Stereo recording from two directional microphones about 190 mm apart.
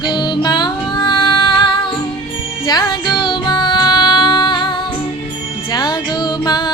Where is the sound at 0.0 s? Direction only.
20° left (ahead or behind).